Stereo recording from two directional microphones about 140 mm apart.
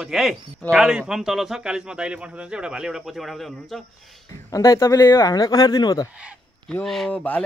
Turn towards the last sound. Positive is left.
turn(degrees=10)  # may be behind; listen again after turning